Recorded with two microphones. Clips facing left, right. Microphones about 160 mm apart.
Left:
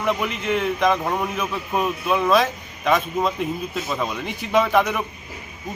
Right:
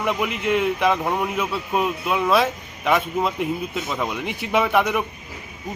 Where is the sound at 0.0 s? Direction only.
15° right (ahead or behind).